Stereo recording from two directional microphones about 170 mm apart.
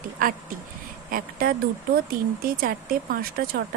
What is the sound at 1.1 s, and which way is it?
Speech, 60° right (ahead or behind).